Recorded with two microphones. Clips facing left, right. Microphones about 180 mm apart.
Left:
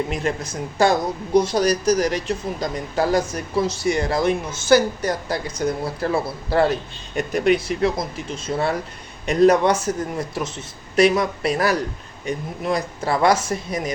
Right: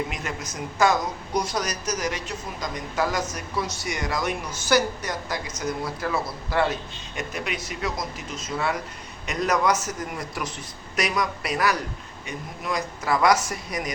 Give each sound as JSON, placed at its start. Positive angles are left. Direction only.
{"t": 0.1, "sound": "speech", "side_deg": 30}